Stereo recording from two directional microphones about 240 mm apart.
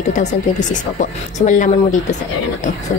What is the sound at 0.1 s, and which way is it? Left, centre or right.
Speech, left.